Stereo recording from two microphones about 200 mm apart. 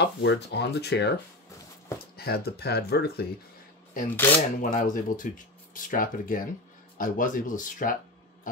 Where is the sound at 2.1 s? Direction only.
50° left (ahead or behind).